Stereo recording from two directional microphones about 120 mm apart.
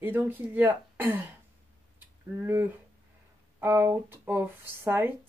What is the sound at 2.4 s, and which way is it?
Speech, 20° right (ahead or behind).